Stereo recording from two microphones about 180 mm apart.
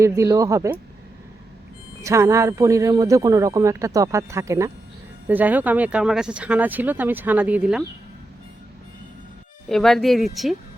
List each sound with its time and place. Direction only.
0.0 s speech: 15° right (ahead or behind)
2.0 s speech: 15° right (ahead or behind)
9.6 s speech: centre (ahead or behind)